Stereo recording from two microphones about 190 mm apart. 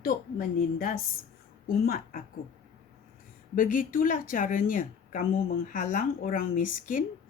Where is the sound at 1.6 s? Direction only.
50° left (ahead or behind).